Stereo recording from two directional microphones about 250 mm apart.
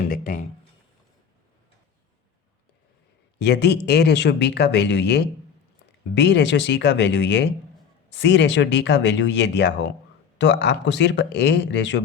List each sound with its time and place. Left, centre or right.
0.1 s speech: left
3.3 s speech: left